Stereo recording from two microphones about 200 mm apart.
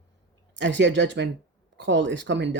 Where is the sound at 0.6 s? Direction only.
65° right (ahead or behind).